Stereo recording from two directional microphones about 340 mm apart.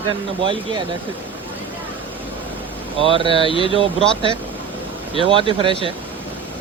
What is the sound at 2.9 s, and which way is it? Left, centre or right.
Speech, centre.